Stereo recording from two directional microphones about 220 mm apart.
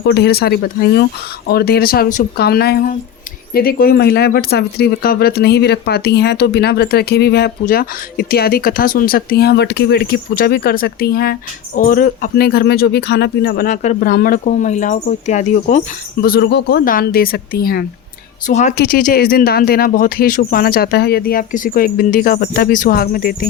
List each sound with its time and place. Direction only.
0.0 s speech: 50° left (ahead or behind); by 15.8 s 35° left (ahead or behind)
16.2 s speech: 45° left (ahead or behind)